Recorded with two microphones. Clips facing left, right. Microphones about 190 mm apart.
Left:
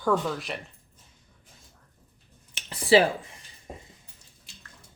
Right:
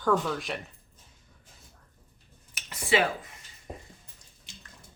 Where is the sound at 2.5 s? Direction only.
30° left (ahead or behind).